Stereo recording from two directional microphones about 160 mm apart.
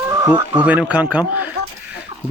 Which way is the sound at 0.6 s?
10° right (ahead or behind).